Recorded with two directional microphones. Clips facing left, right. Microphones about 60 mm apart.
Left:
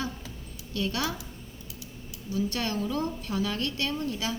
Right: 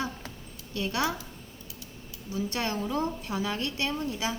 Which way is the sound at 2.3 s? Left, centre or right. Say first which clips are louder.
Left 1 dB; right.